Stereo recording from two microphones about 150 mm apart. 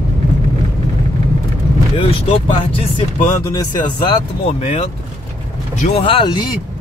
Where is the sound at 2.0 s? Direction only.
35° left (ahead or behind).